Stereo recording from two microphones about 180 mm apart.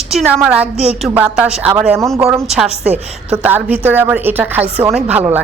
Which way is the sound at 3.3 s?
10° right (ahead or behind).